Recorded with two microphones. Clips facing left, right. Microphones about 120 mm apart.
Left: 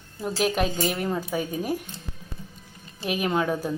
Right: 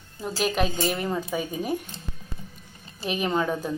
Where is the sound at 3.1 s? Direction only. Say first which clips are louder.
Left 1 dB; 5° left (ahead or behind).